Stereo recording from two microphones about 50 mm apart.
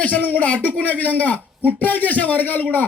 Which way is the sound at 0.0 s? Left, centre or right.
Left.